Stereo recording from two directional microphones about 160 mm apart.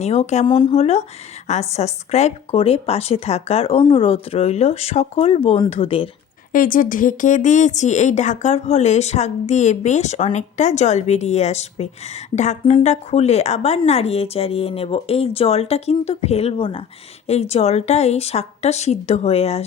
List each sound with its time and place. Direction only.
0.0 s a woman's voice: 45° left (ahead or behind)
0.4 s speech: 30° left (ahead or behind)
0.7 s speech: 40° left (ahead or behind)
6.5 s a woman's voice: 60° left (ahead or behind); by 19.6 s 40° left (ahead or behind)